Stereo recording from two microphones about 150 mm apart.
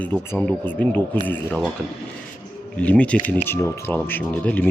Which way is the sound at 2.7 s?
10° left (ahead or behind).